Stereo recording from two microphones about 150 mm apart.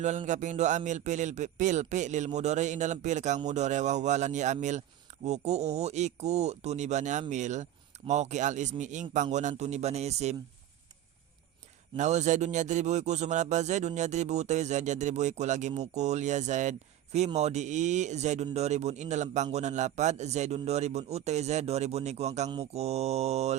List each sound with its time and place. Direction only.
0.3 s speech: 55° right (ahead or behind)
11.9 s speech: 50° right (ahead or behind)